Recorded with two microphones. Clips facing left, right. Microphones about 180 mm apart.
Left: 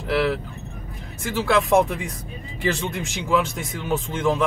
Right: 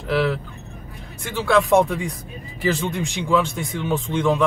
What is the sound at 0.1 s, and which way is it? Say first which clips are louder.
Speech: right 1 dB; centre (ahead or behind).